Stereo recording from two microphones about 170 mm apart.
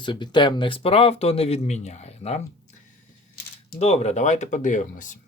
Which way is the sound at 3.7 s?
40° left (ahead or behind).